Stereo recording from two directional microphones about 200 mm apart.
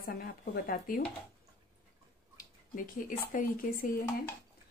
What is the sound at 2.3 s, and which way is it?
Speech, 45° left (ahead or behind).